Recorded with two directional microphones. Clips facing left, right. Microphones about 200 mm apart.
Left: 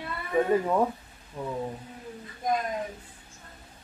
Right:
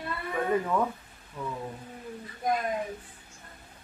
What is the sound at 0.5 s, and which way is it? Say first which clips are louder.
Speech: left 1 dB; 30° left (ahead or behind).